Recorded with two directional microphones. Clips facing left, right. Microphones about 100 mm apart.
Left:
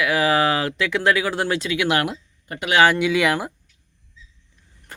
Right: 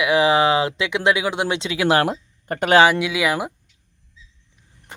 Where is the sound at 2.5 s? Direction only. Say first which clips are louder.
Right 6 dB; 50° right (ahead or behind).